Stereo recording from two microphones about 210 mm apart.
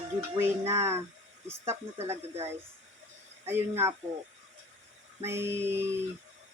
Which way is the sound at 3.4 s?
10° right (ahead or behind).